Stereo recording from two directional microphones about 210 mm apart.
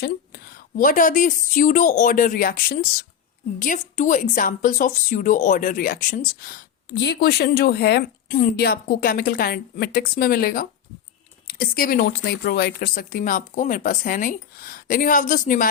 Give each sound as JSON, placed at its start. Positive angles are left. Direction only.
{"t": 0.0, "sound": "a woman's voice", "side_deg": 45}